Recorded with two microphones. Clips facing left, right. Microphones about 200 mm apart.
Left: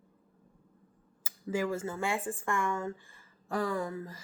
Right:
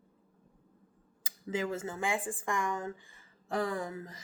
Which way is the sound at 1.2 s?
20° right (ahead or behind).